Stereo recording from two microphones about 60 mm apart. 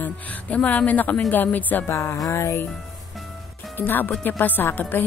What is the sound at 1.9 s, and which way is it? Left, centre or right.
Music, left.